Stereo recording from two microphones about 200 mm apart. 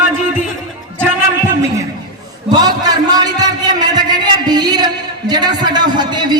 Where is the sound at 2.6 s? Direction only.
20° right (ahead or behind).